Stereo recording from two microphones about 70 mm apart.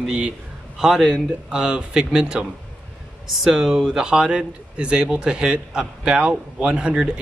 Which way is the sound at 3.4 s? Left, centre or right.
Centre.